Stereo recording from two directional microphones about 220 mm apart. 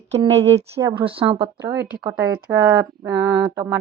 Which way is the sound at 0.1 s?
30° right (ahead or behind).